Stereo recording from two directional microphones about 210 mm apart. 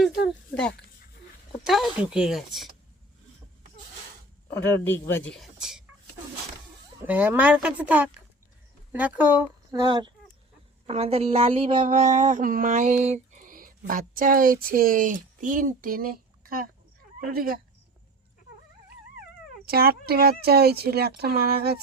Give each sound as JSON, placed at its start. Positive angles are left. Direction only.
{"t": 1.6, "sound": "speech", "side_deg": 0}
{"t": 4.6, "sound": "speech", "side_deg": 10}
{"t": 7.0, "sound": "speech", "side_deg": -10}
{"t": 9.8, "sound": "a woman's voice", "side_deg": -20}
{"t": 19.6, "sound": "speech", "side_deg": -45}